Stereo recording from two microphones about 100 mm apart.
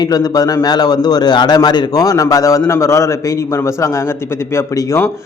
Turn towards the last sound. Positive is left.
turn(degrees=30)  # may be behind; listen again after turning